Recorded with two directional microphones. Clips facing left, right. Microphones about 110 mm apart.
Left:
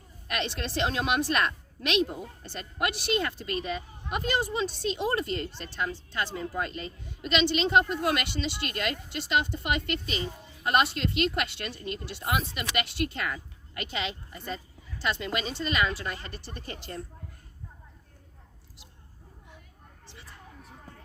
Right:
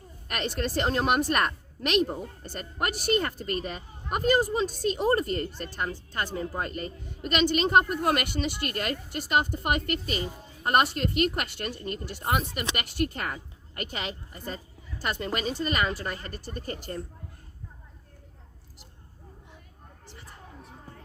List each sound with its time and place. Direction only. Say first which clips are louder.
0.3 s a woman's voice: right 2 dB; 45° right (ahead or behind)